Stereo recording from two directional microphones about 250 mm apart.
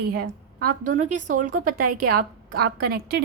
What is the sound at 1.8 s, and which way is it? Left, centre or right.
Speech, right.